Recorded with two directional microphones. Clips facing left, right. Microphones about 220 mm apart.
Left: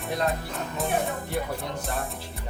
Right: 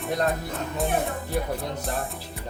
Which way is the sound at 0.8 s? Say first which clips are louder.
Right 1 dB; centre (ahead or behind).